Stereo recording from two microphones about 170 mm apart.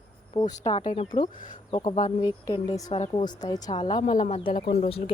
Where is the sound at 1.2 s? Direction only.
50° left (ahead or behind).